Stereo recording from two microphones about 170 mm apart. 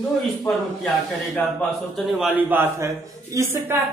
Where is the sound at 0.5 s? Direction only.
Centre (ahead or behind).